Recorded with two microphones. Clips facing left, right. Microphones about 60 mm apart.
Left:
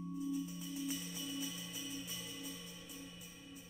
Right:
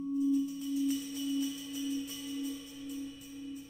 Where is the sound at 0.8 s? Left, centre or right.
Centre.